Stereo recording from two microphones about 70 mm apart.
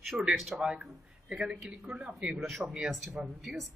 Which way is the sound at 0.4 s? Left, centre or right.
Centre.